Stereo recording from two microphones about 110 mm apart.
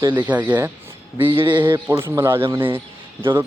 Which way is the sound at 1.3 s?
45° right (ahead or behind).